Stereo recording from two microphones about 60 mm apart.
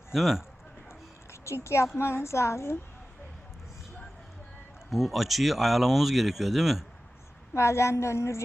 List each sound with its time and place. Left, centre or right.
0.1 s speech: centre
0.9 s a sound: left
2.0 s a woman's voice: left
4.9 s speech: centre
7.5 s a woman's voice: left